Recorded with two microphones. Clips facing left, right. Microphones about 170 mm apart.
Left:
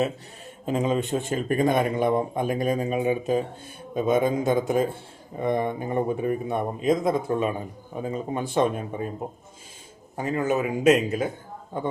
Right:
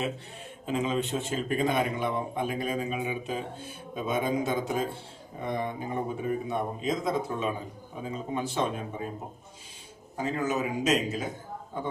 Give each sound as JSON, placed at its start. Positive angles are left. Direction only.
{"t": 0.6, "sound": "a man's voice", "side_deg": 40}
{"t": 10.2, "sound": "a man's voice", "side_deg": 55}